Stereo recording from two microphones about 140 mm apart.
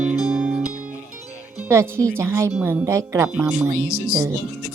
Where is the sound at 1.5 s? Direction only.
20° right (ahead or behind).